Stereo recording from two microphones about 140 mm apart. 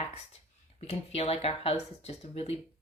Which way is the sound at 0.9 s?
45° left (ahead or behind).